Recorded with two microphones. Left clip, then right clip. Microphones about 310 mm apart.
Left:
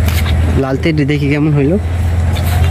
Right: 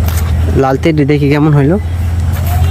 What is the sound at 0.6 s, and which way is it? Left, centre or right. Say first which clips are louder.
Speech: right 5 dB; centre.